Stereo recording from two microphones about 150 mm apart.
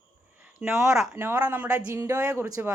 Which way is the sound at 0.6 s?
15° right (ahead or behind).